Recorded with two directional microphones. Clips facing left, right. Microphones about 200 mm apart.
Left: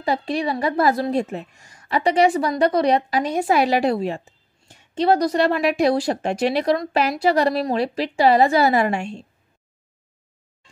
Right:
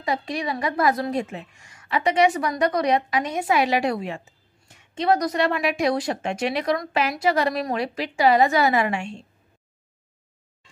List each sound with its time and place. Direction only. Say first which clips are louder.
0.0 s speech: left 4 dB; 30° left (ahead or behind)